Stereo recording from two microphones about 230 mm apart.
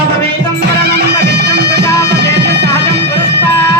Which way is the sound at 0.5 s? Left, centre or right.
Right.